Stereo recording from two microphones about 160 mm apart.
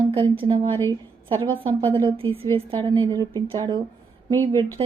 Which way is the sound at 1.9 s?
30° right (ahead or behind).